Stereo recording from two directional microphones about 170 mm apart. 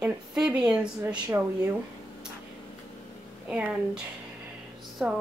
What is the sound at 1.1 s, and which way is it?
Speech, 20° right (ahead or behind).